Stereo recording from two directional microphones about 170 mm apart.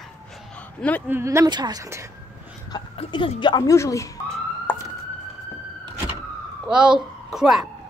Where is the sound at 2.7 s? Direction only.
30° left (ahead or behind).